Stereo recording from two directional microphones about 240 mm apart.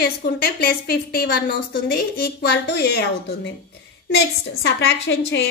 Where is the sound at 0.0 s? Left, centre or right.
Left.